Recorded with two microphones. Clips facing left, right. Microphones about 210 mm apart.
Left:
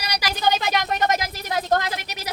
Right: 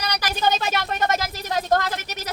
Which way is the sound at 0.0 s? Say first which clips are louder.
Even; 10° left (ahead or behind).